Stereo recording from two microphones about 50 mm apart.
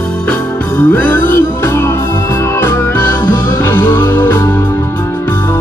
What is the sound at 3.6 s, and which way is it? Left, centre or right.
Music, left.